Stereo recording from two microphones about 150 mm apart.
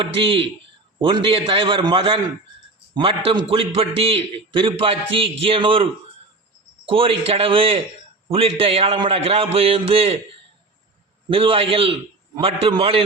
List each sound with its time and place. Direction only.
0.0 s a man's voice: 35° right (ahead or behind)
11.3 s a man's voice: 35° right (ahead or behind)